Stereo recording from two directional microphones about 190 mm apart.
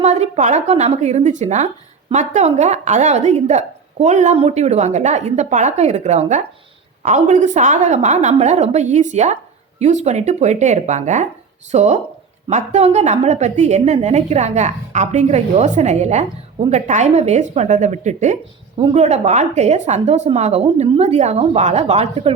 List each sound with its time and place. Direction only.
0.0 s a woman's voice: 35° right (ahead or behind)
18.8 s speech: 25° right (ahead or behind)
19.0 s a woman's voice: 35° right (ahead or behind)